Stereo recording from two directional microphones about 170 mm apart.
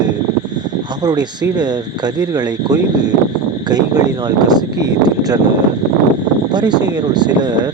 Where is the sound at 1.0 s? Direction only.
25° right (ahead or behind).